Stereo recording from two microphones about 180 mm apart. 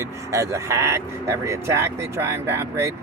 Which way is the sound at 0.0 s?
15° right (ahead or behind).